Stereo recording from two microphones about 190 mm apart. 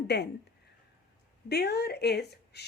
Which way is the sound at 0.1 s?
60° left (ahead or behind).